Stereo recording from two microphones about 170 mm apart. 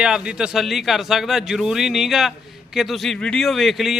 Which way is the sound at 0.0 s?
5° right (ahead or behind).